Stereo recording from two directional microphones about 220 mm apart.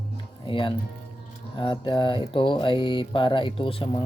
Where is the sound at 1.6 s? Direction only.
20° left (ahead or behind).